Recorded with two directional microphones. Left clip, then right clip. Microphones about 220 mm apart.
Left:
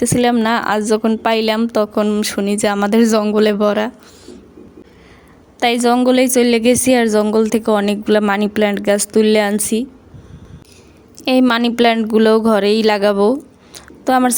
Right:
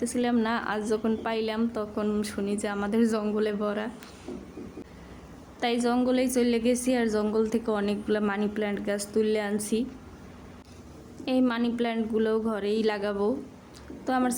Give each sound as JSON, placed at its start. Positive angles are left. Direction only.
{"t": 0.0, "sound": "a woman's voice", "side_deg": 40}
{"t": 5.5, "sound": "a woman's voice", "side_deg": 40}
{"t": 11.3, "sound": "a woman's voice", "side_deg": 45}
{"t": 13.7, "sound": "a sound", "side_deg": 40}